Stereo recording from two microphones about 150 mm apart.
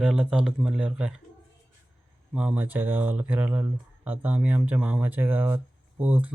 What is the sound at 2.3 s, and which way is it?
Speech, 5° right (ahead or behind).